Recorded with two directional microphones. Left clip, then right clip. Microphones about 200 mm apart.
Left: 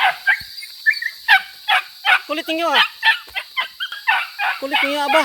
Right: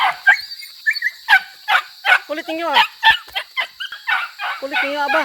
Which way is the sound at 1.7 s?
15° right (ahead or behind).